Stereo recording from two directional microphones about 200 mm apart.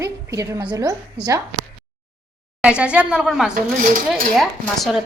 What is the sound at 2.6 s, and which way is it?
A woman's voice, 5° right (ahead or behind).